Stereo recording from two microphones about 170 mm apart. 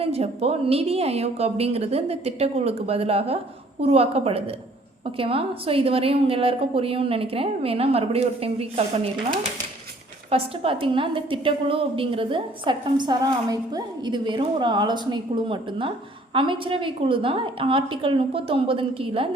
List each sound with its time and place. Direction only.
0.0 s a woman's voice: 35° right (ahead or behind)
10.2 s a woman's voice: 35° right (ahead or behind)